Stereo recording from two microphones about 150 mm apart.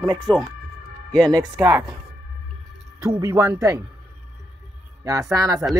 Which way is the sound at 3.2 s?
20° right (ahead or behind).